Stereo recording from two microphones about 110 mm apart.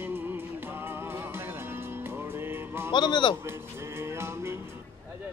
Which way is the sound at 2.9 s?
45° left (ahead or behind).